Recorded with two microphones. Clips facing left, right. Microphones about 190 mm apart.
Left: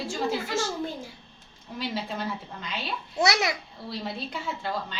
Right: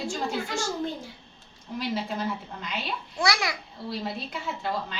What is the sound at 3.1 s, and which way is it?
Speech, 20° left (ahead or behind).